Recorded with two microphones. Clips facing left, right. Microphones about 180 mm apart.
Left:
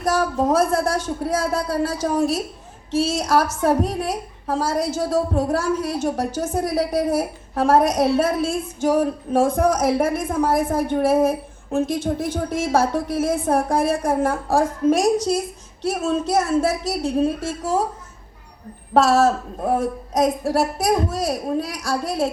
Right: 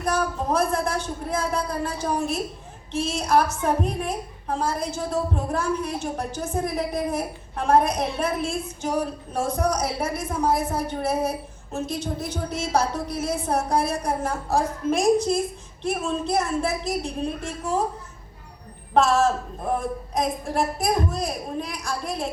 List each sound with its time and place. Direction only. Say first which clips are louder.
0.2 s a woman's voice: left 5 dB; 45° left (ahead or behind)
2.1 s child singing: left 5 dB; 40° left (ahead or behind)
6.1 s a woman's voice: left 5 dB; 90° left
6.6 s child singing: left 5 dB; 40° left (ahead or behind)
9.0 s a woman's voice: left 7 dB; 55° left (ahead or behind)
18.9 s child singing: left 4 dB; 40° left (ahead or behind)